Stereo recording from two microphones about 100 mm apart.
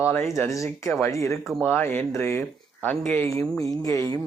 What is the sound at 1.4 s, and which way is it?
Speech, centre (ahead or behind).